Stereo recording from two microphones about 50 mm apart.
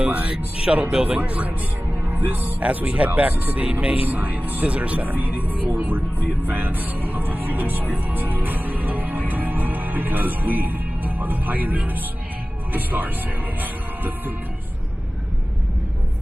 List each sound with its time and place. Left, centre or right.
0.0 s speech: right
2.0 s speech: right
9.3 s music: right
12.7 s speech: right
13.6 s music: right